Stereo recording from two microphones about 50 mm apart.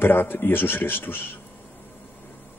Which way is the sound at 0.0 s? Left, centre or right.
Left.